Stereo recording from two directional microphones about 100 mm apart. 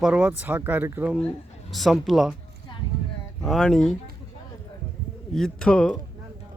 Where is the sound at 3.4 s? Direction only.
Centre (ahead or behind).